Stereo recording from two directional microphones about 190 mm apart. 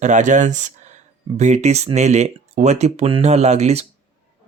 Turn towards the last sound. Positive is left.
turn(degrees=-35)  # may be behind; listen again after turning